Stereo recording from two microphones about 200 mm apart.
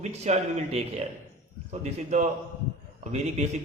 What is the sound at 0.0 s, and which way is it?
A man's voice, 35° right (ahead or behind).